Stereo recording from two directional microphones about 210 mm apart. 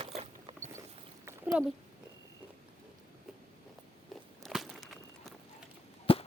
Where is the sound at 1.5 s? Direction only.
5° right (ahead or behind).